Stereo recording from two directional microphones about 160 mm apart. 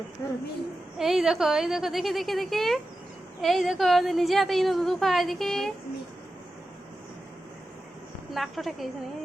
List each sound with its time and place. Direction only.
0.2 s a woman's voice: 20° left (ahead or behind)
0.9 s a woman's voice: 5° right (ahead or behind)
8.3 s a woman's voice: centre (ahead or behind)